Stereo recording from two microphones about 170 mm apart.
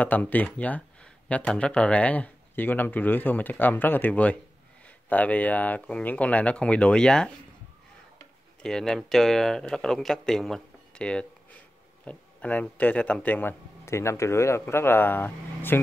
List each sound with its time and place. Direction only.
0.0 s speech: 10° left (ahead or behind)
8.6 s speech: 5° left (ahead or behind)